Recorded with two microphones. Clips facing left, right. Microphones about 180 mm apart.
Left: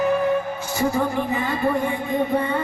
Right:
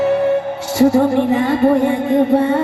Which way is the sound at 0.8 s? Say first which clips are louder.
Right 10 dB; 70° right (ahead or behind).